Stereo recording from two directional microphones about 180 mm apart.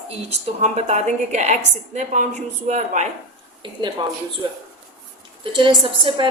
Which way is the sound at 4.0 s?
30° right (ahead or behind).